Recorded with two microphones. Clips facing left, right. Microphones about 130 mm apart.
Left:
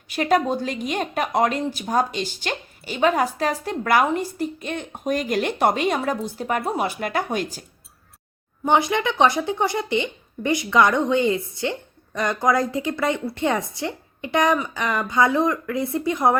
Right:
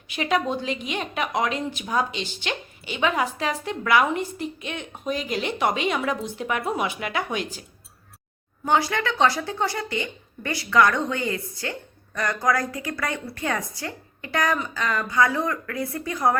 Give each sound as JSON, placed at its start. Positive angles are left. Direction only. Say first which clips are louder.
{"t": 0.2, "sound": "a woman's voice", "louder": "left 4 dB", "side_deg": 45}
{"t": 8.6, "sound": "speech", "louder": "left 3 dB", "side_deg": 20}